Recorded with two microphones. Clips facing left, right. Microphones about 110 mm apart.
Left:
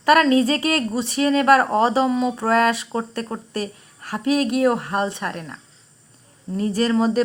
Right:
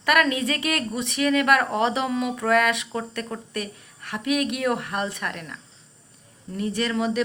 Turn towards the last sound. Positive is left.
turn(degrees=35)  # may be behind; listen again after turning